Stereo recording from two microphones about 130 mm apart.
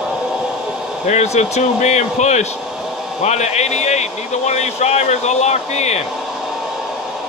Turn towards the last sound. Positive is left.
turn(degrees=60)  # may be behind; listen again after turning